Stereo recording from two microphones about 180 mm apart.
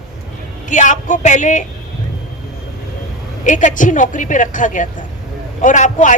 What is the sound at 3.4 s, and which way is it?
A woman's voice, 45° left (ahead or behind).